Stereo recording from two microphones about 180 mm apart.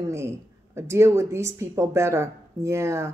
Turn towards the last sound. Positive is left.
turn(degrees=-15)  # may be behind; listen again after turning